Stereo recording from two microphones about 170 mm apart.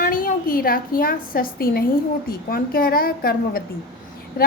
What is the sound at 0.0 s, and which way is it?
A woman's voice, 55° left (ahead or behind).